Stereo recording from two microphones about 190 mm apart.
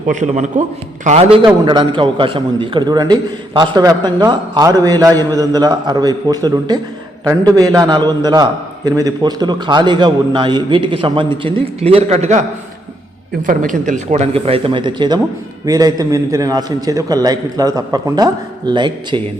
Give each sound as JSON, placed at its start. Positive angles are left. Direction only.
{"t": 0.1, "sound": "a man's voice", "side_deg": -40}